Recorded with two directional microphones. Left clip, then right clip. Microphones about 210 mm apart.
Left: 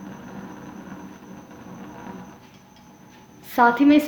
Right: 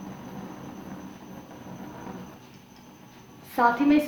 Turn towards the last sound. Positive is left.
turn(degrees=45)  # may be behind; listen again after turning